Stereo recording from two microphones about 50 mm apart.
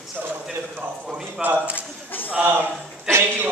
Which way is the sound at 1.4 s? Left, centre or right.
Right.